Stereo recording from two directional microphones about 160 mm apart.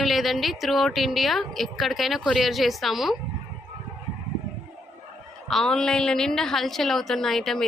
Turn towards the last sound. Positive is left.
turn(degrees=0)  # may be behind; listen again after turning